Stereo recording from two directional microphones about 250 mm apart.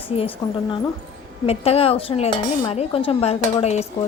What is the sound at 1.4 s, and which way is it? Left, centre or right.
Speech, left.